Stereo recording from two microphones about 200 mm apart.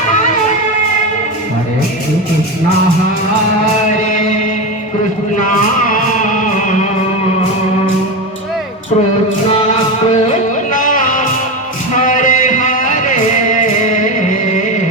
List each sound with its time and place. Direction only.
5.9 s music: 40° left (ahead or behind)
10.7 s music: 40° left (ahead or behind)